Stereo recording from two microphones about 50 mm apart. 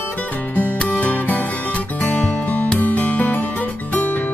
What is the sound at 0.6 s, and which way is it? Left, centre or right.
Music, left.